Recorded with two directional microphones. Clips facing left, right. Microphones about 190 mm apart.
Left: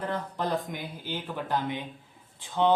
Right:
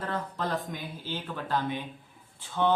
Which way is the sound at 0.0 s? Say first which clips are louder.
Left 2 dB; 15° left (ahead or behind).